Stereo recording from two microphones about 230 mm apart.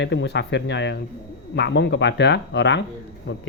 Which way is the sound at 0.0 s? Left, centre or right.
Left.